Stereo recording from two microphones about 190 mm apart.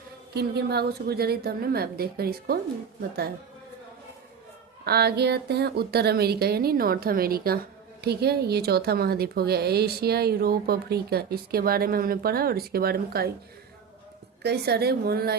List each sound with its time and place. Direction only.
0.3 s speech: 60° right (ahead or behind)
4.9 s speech: 60° right (ahead or behind)
14.4 s speech: 60° right (ahead or behind)